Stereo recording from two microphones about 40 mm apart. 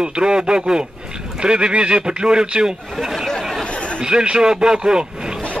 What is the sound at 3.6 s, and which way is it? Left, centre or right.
Chatter, left.